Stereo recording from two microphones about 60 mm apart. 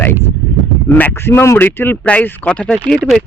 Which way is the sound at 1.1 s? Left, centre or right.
Left.